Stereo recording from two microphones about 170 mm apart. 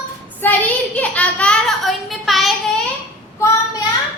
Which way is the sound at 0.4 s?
10° left (ahead or behind).